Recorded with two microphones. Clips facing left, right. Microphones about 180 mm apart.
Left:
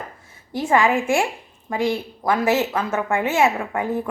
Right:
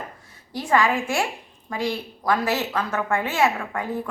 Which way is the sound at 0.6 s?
25° left (ahead or behind).